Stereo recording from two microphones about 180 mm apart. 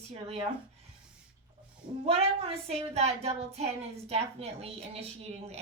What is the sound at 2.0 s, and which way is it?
A woman's voice, 35° right (ahead or behind).